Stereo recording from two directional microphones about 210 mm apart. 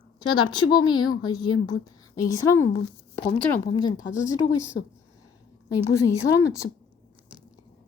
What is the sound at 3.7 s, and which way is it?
Speech, 20° left (ahead or behind).